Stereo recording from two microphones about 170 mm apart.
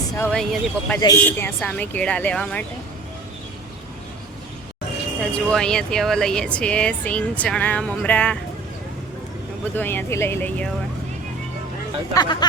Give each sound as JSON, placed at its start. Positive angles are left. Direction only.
{"t": 0.3, "sound": "speech", "side_deg": 5}
{"t": 5.2, "sound": "speech", "side_deg": 5}
{"t": 9.7, "sound": "speech", "side_deg": 10}
{"t": 12.1, "sound": "speech", "side_deg": 25}